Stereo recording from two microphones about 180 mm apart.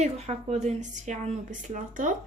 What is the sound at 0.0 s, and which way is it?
A woman's voice, 40° right (ahead or behind).